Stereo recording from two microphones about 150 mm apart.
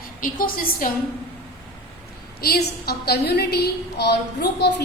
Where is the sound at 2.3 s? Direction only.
90° left.